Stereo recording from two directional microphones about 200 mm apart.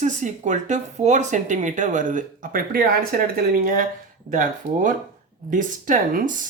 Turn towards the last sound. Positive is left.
turn(degrees=-40)  # may be behind; listen again after turning